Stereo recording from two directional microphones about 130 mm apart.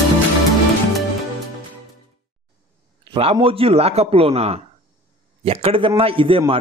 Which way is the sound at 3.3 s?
45° right (ahead or behind).